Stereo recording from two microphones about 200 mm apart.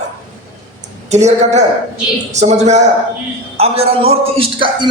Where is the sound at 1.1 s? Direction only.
35° right (ahead or behind).